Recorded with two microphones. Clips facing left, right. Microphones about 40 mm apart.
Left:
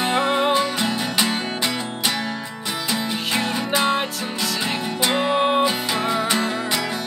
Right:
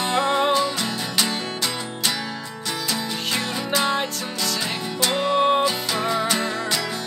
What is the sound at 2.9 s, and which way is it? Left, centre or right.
Music, centre.